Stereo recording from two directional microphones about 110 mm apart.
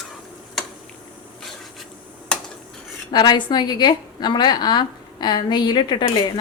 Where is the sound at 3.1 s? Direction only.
40° left (ahead or behind).